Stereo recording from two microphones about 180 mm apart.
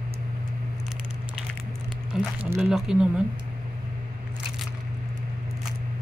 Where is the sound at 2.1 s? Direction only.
Centre (ahead or behind).